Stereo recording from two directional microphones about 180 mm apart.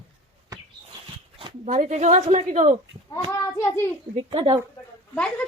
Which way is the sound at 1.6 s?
45° right (ahead or behind).